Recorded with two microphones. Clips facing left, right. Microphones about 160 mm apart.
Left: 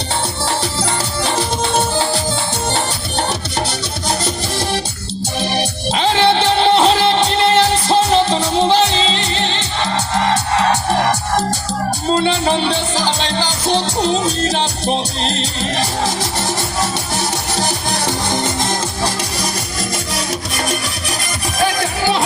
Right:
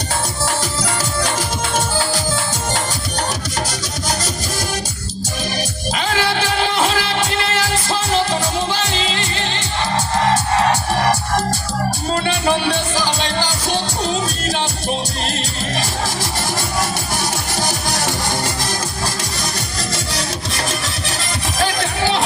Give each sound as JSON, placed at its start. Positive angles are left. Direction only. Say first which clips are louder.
{"t": 5.4, "sound": "music", "louder": "left 5 dB", "side_deg": 25}
{"t": 12.1, "sound": "music", "louder": "left 3 dB", "side_deg": 20}
{"t": 17.6, "sound": "music", "louder": "left 1 dB", "side_deg": 20}